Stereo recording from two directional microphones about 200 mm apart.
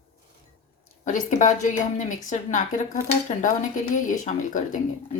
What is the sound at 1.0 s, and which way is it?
Speech, 40° left (ahead or behind).